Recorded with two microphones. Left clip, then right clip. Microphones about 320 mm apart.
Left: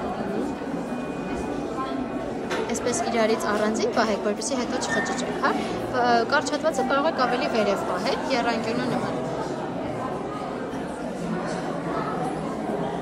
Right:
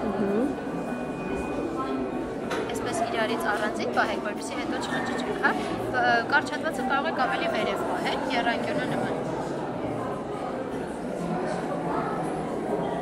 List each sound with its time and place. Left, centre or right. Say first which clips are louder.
3.2 s a woman's voice: left 5 dB; centre
5.9 s speech: left 2 dB; centre